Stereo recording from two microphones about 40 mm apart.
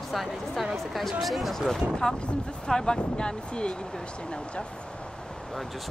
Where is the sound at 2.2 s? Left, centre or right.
Left.